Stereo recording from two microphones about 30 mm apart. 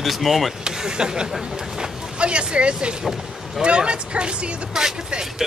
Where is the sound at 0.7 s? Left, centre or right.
Right.